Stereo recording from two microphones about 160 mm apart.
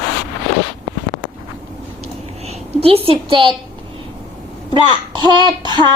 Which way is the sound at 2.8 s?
35° right (ahead or behind).